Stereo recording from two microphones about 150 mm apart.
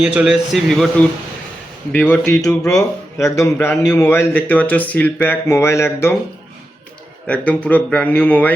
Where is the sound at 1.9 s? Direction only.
10° left (ahead or behind).